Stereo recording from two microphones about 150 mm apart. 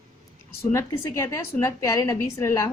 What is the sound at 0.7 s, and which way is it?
A woman's voice, 20° left (ahead or behind).